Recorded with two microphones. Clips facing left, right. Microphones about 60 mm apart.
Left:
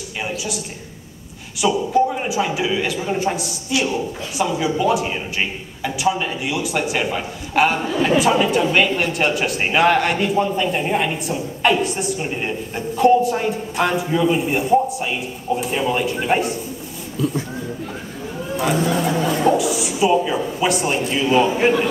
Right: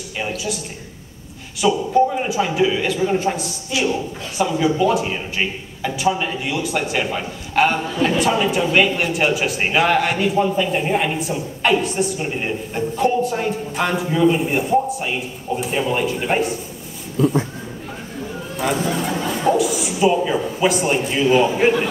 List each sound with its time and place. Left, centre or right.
0.2 s a man's voice: centre
1.6 s a man's voice: centre
17.2 s speech: right
18.6 s a man's voice: centre